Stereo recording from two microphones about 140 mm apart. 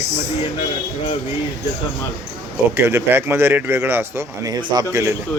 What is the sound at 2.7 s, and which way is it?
Speech, 15° right (ahead or behind).